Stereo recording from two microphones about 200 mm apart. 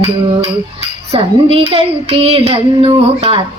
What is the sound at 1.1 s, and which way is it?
Child singing, 30° right (ahead or behind).